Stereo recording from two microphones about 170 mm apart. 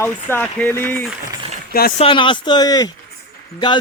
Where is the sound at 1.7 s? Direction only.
60° left (ahead or behind).